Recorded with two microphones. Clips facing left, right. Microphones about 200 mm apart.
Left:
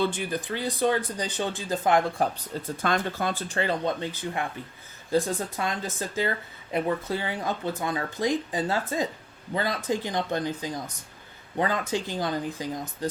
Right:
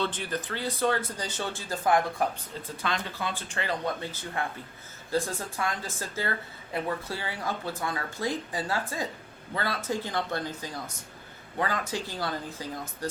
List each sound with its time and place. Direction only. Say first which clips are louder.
0.0 s speech: left 4 dB; 10° left (ahead or behind); by 2.3 s 25° left (ahead or behind)
2.8 s speech: left 5 dB; 45° left (ahead or behind)
3.6 s speech: left 4 dB; 25° left (ahead or behind)